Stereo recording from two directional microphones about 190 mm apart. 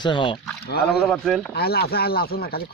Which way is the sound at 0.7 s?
55° left (ahead or behind).